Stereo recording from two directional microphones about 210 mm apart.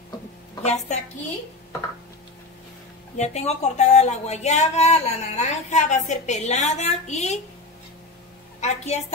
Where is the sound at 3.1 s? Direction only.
30° left (ahead or behind).